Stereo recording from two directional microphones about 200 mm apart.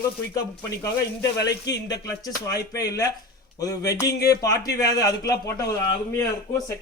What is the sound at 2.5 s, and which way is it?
Speech, 20° left (ahead or behind).